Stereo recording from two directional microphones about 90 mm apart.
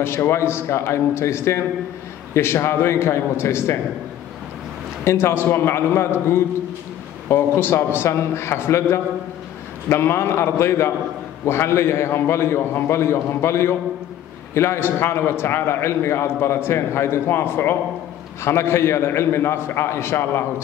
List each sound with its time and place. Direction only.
0.0 s a man's voice: 25° left (ahead or behind)
5.0 s a man's voice: 30° left (ahead or behind)